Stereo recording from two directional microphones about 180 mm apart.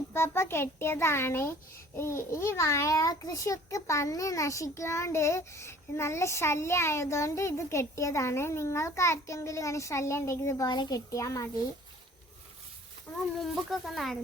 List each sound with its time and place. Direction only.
0.1 s a child's voice: 15° left (ahead or behind)
13.4 s speech: centre (ahead or behind)